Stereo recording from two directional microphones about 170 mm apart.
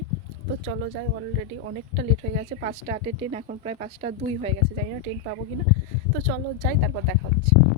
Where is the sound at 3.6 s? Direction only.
40° right (ahead or behind).